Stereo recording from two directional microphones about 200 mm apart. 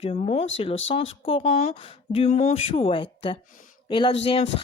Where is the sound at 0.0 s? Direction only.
30° left (ahead or behind).